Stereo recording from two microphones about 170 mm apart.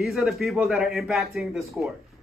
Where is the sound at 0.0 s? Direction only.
Centre (ahead or behind).